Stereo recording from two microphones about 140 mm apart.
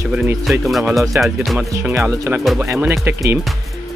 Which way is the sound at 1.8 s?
15° right (ahead or behind).